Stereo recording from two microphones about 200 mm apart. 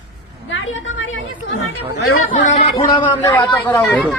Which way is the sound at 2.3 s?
40° left (ahead or behind).